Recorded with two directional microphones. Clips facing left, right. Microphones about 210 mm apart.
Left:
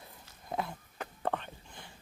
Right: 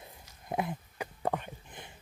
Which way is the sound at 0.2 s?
15° right (ahead or behind).